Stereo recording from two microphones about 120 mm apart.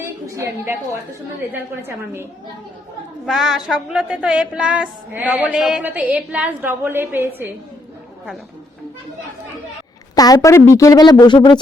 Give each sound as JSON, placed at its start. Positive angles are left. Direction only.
{"t": 0.0, "sound": "a woman's voice", "side_deg": -25}
{"t": 3.2, "sound": "a woman's voice", "side_deg": -5}
{"t": 10.2, "sound": "speech", "side_deg": 30}